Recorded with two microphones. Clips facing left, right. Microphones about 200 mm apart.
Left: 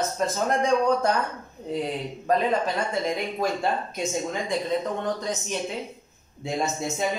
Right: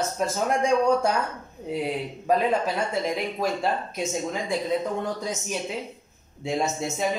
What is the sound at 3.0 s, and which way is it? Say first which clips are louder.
Speech: even; 5° right (ahead or behind).